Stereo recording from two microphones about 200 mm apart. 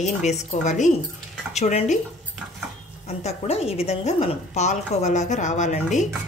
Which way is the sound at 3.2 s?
30° left (ahead or behind).